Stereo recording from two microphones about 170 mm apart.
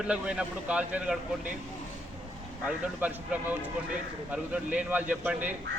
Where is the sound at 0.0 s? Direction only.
5° right (ahead or behind).